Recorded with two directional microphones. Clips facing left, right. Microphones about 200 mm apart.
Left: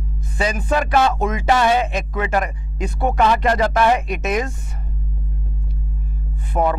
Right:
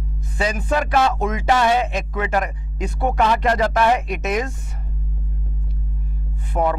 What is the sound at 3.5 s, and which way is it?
Speech, 25° left (ahead or behind).